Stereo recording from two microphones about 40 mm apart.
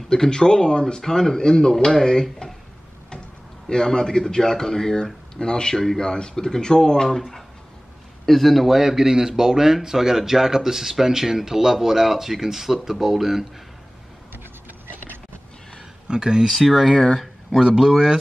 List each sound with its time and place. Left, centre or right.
0.1 s speech: centre
3.6 s a man's voice: centre
16.1 s speech: centre
16.4 s speech: centre
17.6 s speech: centre